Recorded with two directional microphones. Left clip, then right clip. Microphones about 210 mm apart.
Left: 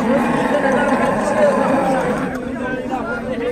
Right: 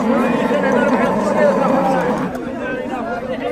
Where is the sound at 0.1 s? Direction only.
50° right (ahead or behind).